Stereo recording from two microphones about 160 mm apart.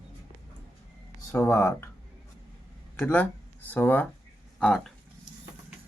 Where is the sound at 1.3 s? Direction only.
20° left (ahead or behind).